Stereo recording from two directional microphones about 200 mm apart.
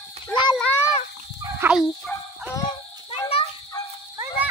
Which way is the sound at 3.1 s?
30° left (ahead or behind).